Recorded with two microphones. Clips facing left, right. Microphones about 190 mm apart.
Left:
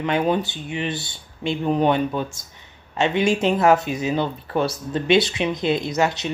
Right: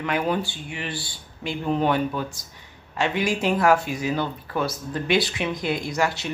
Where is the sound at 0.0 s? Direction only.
20° left (ahead or behind).